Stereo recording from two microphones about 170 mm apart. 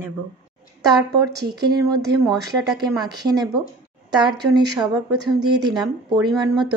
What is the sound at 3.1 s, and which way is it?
Speech, 25° right (ahead or behind).